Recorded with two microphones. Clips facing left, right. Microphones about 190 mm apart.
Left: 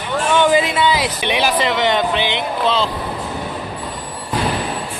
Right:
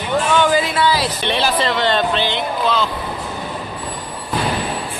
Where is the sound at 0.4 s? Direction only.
20° left (ahead or behind).